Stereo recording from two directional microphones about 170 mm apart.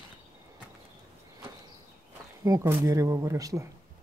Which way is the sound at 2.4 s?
20° right (ahead or behind).